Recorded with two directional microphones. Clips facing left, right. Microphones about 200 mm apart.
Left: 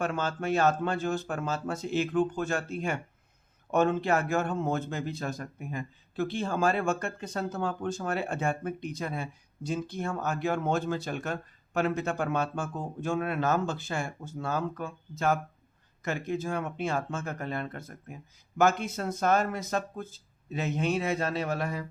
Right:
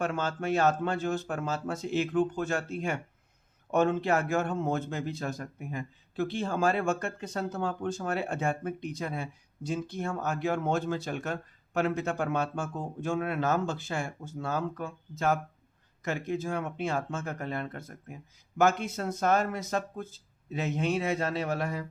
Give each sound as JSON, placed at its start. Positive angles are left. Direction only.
{"t": 0.0, "sound": "speech", "side_deg": -25}